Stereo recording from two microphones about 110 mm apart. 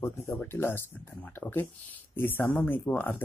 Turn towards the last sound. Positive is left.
turn(degrees=15)  # may be behind; listen again after turning